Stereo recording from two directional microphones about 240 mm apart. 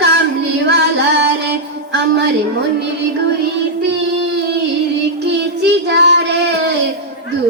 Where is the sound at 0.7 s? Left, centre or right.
Right.